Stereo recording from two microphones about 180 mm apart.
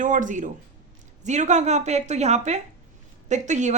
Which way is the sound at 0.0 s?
45° right (ahead or behind).